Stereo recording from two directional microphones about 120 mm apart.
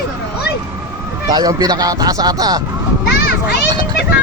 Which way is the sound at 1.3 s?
30° right (ahead or behind).